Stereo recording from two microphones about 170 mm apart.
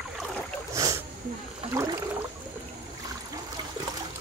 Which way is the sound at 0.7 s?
20° right (ahead or behind).